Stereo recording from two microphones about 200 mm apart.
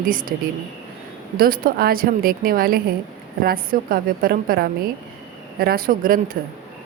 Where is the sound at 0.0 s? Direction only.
45° right (ahead or behind).